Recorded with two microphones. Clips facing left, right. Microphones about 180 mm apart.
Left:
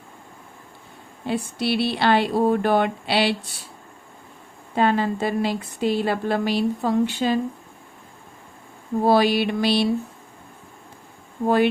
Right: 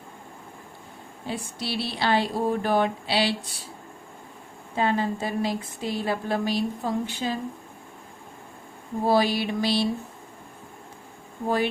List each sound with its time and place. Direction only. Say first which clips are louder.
1.3 s speech: left 8 dB; 65° left (ahead or behind)
4.7 s a woman's voice: left 4 dB; 70° left (ahead or behind)
9.0 s a woman's voice: left 4 dB; 70° left (ahead or behind)
11.4 s a woman's voice: left 6 dB; 65° left (ahead or behind)